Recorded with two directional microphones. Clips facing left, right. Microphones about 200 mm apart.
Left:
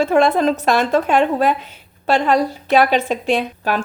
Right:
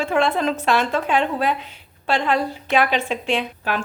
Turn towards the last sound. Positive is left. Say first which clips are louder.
# left 4 dB
turn(degrees=40)  # may be behind; listen again after turning